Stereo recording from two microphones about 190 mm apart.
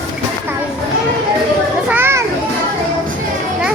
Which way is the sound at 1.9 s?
10° right (ahead or behind).